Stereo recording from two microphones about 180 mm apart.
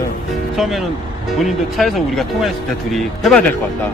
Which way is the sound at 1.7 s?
Centre (ahead or behind).